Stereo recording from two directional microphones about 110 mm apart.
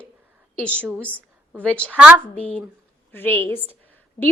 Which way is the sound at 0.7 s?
15° right (ahead or behind).